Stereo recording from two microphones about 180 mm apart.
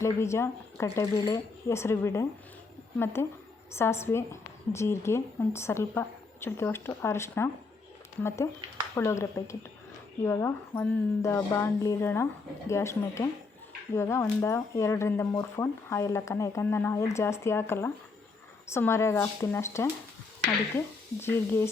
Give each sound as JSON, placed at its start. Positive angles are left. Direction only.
{"t": 0.0, "sound": "speech", "side_deg": 15}
{"t": 9.0, "sound": "speech", "side_deg": 15}